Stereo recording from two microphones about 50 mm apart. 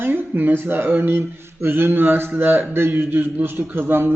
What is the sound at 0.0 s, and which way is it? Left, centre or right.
A man's voice, right.